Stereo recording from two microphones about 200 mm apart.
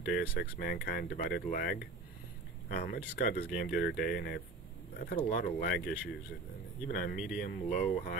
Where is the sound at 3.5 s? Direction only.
50° left (ahead or behind).